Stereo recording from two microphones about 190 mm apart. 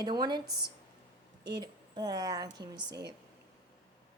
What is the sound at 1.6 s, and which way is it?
Speech, 20° right (ahead or behind).